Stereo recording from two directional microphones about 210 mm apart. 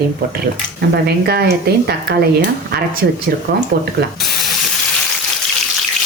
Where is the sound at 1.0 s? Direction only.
50° right (ahead or behind).